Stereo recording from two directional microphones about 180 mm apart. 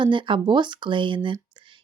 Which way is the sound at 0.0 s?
25° right (ahead or behind).